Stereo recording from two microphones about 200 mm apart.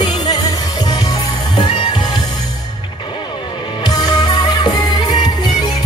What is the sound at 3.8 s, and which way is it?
Music, 20° left (ahead or behind).